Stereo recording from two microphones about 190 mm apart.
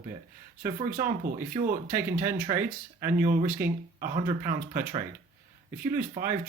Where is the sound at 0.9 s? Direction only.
45° right (ahead or behind).